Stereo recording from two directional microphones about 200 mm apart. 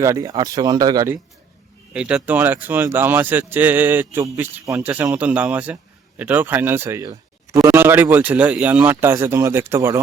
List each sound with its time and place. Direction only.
0.0 s speech: 15° right (ahead or behind)
1.9 s speech: 5° right (ahead or behind)